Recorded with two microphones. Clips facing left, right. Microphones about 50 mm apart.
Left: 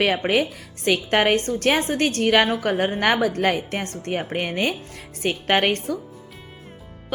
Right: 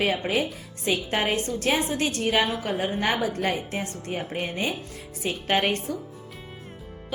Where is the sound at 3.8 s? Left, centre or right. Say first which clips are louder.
Left 4 dB; left.